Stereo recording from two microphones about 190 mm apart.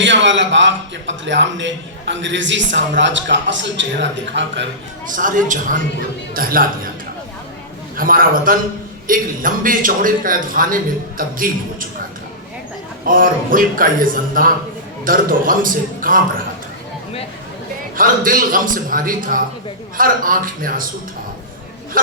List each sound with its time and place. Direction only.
0.0 s a man's voice: 75° right (ahead or behind)
5.1 s a man's voice: 45° right (ahead or behind)
7.9 s a man's voice: 45° right (ahead or behind)
13.1 s a man's voice: 45° right (ahead or behind)
17.9 s a man's voice: 45° right (ahead or behind)
22.0 s a man's voice: 45° right (ahead or behind)